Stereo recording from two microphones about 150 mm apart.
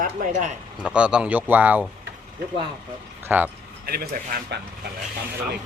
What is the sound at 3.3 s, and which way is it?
Speech, 10° right (ahead or behind).